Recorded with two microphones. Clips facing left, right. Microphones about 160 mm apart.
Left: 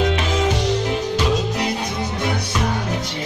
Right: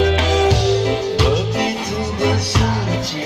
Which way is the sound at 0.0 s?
85° right.